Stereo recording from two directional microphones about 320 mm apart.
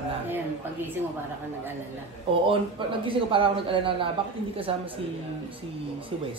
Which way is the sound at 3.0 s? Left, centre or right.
Centre.